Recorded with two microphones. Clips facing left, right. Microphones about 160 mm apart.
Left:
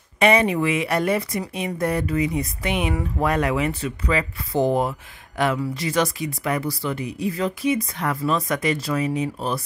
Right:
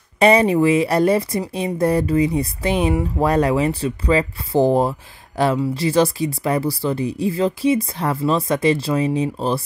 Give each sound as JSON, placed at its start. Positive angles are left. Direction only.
{"t": 0.2, "sound": "speech", "side_deg": -35}